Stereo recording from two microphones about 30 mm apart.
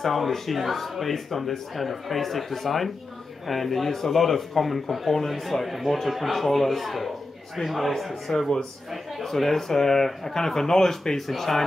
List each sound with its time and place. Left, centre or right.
0.0 s speech: centre
8.3 s speech: left
8.9 s speech: centre
9.3 s speech: centre